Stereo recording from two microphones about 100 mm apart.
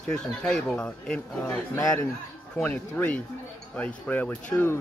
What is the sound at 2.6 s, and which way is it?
Speech, 15° left (ahead or behind).